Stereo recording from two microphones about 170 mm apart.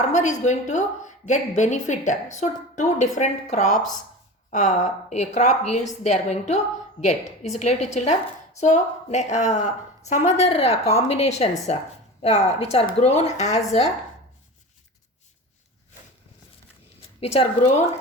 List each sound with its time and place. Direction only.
0.0 s a woman's voice: 45° left (ahead or behind)
17.2 s a woman's voice: 40° left (ahead or behind)